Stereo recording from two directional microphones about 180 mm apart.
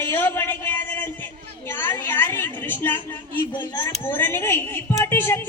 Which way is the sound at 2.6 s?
10° left (ahead or behind).